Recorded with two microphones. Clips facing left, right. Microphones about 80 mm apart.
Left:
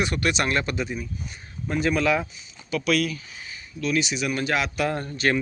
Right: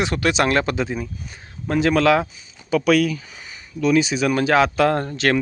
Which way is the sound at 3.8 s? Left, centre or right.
Right.